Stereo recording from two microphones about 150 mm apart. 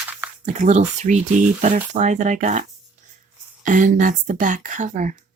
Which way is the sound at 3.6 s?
60° right (ahead or behind).